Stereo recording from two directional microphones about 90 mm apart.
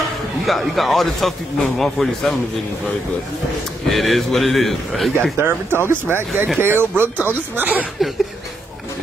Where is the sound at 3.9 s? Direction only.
Centre (ahead or behind).